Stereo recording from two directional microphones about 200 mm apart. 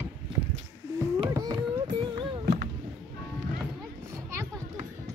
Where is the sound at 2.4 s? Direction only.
55° right (ahead or behind).